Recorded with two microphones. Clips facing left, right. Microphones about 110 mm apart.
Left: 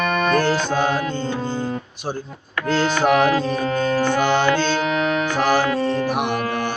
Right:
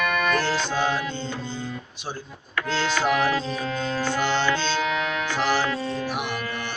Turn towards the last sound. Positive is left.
turn(degrees=50)  # may be behind; listen again after turning